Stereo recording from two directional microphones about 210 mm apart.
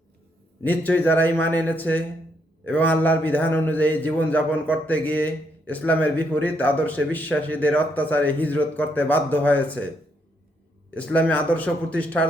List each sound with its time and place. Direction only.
0.6 s a man's voice: 5° left (ahead or behind)
10.9 s a man's voice: 5° left (ahead or behind)